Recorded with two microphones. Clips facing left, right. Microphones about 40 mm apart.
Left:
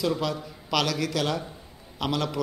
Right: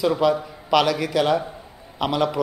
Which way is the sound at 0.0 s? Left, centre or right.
Centre.